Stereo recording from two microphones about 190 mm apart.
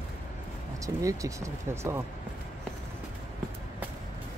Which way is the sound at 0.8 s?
15° right (ahead or behind).